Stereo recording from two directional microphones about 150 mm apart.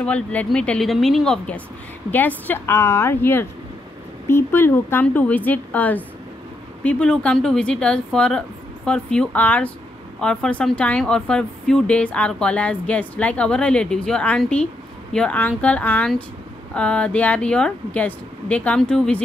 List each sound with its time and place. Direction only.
0.0 s speech: 10° left (ahead or behind)